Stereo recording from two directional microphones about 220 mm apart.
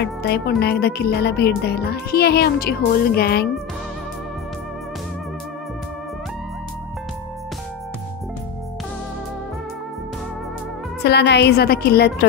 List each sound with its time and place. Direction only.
0.0 s speech: 45° left (ahead or behind)
11.1 s speech: 50° left (ahead or behind)